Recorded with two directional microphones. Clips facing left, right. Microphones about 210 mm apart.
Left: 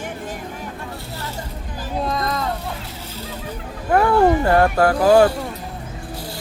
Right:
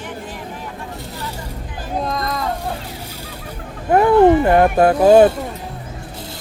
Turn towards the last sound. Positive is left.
turn(degrees=-20)  # may be behind; listen again after turning